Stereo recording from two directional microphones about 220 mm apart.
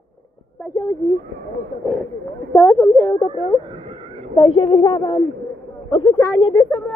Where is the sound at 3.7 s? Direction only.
25° right (ahead or behind).